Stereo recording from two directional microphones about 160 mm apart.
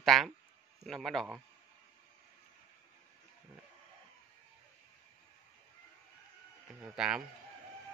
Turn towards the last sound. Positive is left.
turn(degrees=-5)  # may be behind; listen again after turning